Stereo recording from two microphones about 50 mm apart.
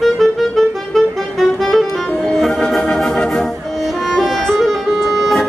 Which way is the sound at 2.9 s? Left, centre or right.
Centre.